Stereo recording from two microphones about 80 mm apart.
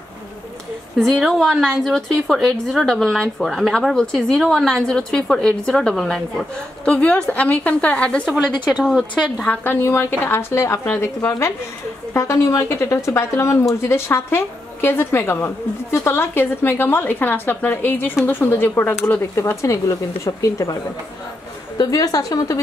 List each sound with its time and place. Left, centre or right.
0.9 s a woman's voice: centre
8.6 s a woman's voice: centre
9.7 s a woman's voice: left
19.3 s a woman's voice: left